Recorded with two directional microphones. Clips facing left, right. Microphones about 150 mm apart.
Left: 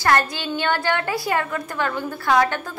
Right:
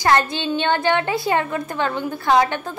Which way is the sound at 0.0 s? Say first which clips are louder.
Right 2 dB; 20° right (ahead or behind).